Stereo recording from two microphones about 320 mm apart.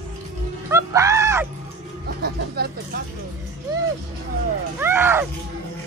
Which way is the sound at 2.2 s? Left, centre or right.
Right.